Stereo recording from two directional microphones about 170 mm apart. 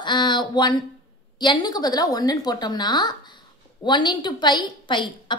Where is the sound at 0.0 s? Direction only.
25° left (ahead or behind).